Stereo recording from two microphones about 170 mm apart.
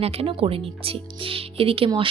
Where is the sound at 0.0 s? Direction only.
35° right (ahead or behind).